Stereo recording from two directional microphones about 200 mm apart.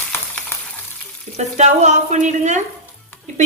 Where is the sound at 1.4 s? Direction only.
35° right (ahead or behind).